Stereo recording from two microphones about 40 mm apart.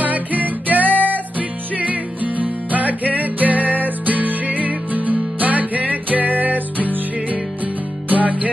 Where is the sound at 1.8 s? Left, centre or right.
Right.